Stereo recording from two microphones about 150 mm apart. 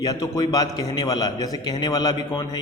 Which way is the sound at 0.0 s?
25° left (ahead or behind).